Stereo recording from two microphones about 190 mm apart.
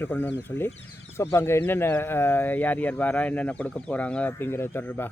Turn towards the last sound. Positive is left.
turn(degrees=10)  # may be behind; listen again after turning